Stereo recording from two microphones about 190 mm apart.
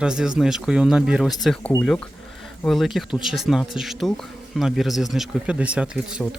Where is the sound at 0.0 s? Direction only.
5° right (ahead or behind).